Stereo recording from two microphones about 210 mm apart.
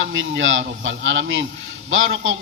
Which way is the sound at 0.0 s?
65° right (ahead or behind).